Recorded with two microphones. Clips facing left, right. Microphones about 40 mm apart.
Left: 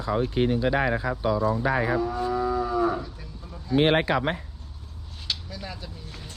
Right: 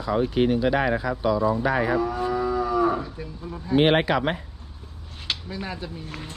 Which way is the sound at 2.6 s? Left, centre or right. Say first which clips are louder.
Right 2 dB; right.